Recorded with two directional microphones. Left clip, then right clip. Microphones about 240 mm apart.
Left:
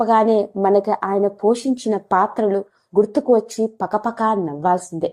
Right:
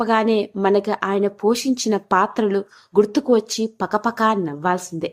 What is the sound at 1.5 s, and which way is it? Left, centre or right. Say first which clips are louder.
Speech: even; centre.